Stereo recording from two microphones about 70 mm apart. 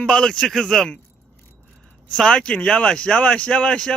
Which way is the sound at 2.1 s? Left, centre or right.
Centre.